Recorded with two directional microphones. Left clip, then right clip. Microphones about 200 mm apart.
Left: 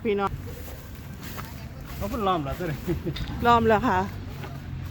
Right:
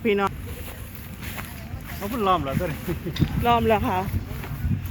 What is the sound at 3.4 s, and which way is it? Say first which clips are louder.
Speech: left 1 dB; 25° left (ahead or behind).